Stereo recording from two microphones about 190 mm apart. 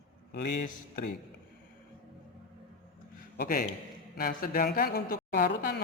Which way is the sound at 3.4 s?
50° left (ahead or behind).